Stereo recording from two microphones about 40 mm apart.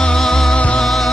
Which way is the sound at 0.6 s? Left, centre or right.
Left.